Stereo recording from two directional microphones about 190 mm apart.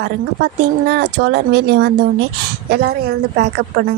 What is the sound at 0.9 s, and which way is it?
Speech, 60° right (ahead or behind).